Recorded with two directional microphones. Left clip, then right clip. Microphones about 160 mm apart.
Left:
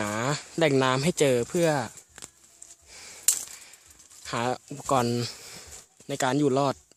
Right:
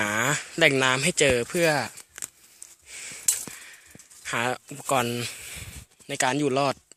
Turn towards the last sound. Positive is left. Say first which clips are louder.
# even
turn(degrees=20)  # may be behind; listen again after turning